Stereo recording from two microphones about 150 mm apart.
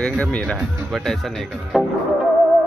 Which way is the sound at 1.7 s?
Centre (ahead or behind).